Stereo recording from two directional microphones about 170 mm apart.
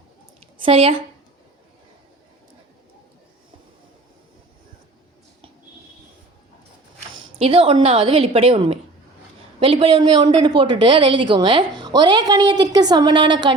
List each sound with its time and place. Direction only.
0.6 s a woman's voice: 35° right (ahead or behind)
7.2 s a woman's voice: 35° right (ahead or behind)